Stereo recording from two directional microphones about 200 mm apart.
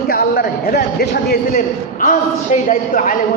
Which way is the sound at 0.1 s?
50° left (ahead or behind).